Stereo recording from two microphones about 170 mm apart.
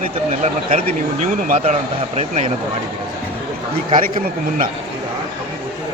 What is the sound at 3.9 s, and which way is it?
Speech, 50° right (ahead or behind).